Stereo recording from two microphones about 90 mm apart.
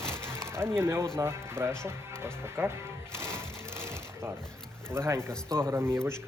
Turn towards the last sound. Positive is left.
turn(degrees=-25)  # may be behind; listen again after turning